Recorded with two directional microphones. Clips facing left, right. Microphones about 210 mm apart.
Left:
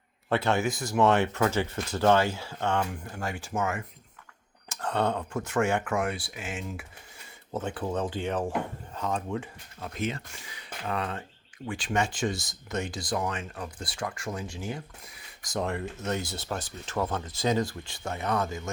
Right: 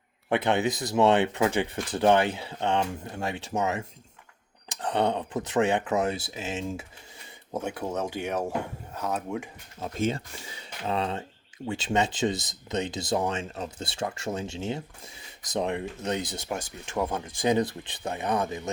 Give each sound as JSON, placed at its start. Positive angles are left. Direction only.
{"t": 0.3, "sound": "speech", "side_deg": -15}
{"t": 7.5, "sound": "speech", "side_deg": -10}
{"t": 9.8, "sound": "speech", "side_deg": -30}